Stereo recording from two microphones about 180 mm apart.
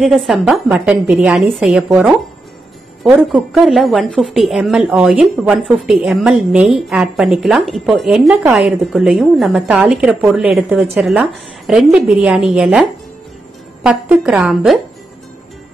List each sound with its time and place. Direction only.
0.0 s a woman's voice: centre (ahead or behind)
13.8 s a woman's voice: 5° right (ahead or behind)